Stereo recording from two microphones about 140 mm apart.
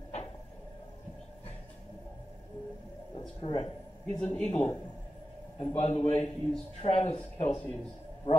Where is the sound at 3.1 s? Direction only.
40° left (ahead or behind).